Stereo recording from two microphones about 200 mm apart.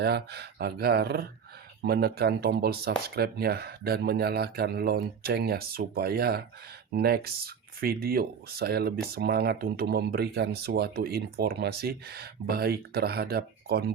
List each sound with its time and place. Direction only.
0.0 s speech: 55° right (ahead or behind)